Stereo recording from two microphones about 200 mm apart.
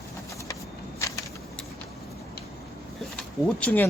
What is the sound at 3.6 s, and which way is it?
Speech, 10° left (ahead or behind).